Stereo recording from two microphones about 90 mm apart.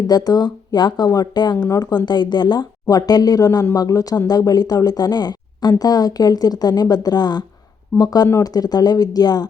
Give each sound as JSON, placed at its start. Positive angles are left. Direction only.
{"t": 0.1, "sound": "speech", "side_deg": 50}
{"t": 2.8, "sound": "speech", "side_deg": 45}